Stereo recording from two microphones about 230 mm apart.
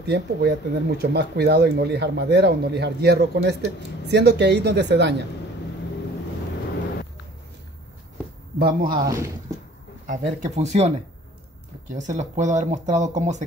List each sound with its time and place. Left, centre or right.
0.0 s speech: right
8.5 s speech: right
9.0 s speech: centre
10.0 s speech: right
11.9 s speech: right